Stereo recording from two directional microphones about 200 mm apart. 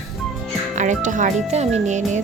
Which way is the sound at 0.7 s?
35° right (ahead or behind).